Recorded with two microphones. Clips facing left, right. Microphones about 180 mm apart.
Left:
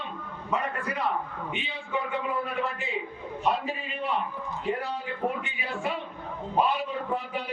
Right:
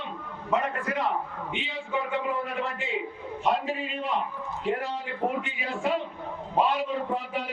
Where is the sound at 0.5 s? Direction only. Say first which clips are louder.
Right 3 dB; 90° right.